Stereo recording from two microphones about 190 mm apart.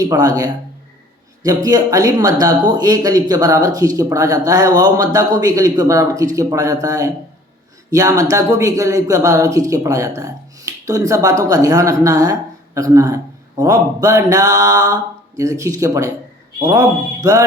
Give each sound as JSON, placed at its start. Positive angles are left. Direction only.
{"t": 0.0, "sound": "speech", "side_deg": -20}